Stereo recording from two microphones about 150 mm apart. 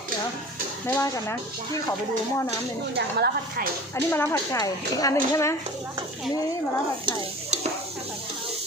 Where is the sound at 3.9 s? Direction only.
15° left (ahead or behind).